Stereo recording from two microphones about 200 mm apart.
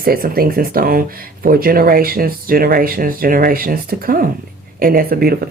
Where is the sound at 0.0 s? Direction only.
50° right (ahead or behind).